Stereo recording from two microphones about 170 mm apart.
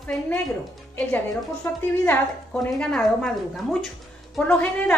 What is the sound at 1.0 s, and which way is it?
A woman's voice, 10° left (ahead or behind).